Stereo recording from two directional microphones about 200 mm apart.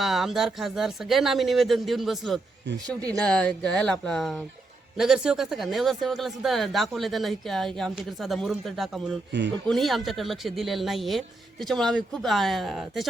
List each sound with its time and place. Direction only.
0.0 s speech: centre (ahead or behind)
9.3 s speech: 60° right (ahead or behind)
9.6 s speech: centre (ahead or behind)